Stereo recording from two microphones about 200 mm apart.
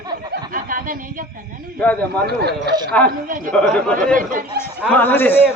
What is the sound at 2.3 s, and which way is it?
Speech, 55° right (ahead or behind).